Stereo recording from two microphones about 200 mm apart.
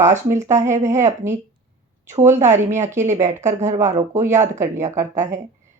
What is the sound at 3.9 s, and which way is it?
Speech, 10° right (ahead or behind).